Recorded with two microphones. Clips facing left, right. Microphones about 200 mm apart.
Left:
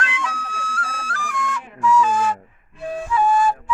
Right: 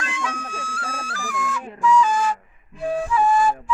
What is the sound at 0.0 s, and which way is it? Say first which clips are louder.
Flute: left 1 dB; 10° right (ahead or behind).